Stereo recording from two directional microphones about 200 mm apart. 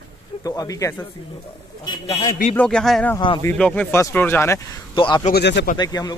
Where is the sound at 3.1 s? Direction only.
25° left (ahead or behind).